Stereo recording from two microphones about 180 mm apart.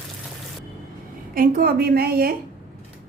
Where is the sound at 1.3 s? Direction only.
55° right (ahead or behind).